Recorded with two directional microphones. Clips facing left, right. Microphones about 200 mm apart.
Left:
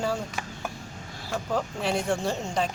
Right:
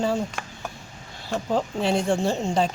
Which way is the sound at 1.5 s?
25° right (ahead or behind).